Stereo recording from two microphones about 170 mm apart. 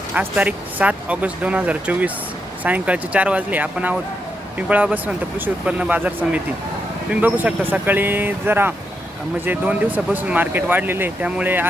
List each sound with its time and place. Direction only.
0.1 s speech: 10° right (ahead or behind)